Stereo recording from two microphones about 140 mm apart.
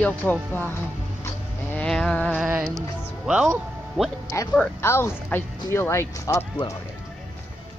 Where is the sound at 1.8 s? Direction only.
5° left (ahead or behind).